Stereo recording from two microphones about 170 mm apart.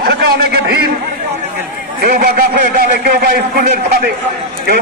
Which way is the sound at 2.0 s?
60° right (ahead or behind).